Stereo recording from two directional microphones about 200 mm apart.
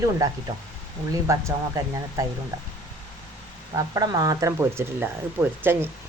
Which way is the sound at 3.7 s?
20° right (ahead or behind).